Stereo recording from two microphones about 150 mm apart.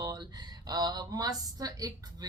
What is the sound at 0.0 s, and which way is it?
Speech, 25° right (ahead or behind).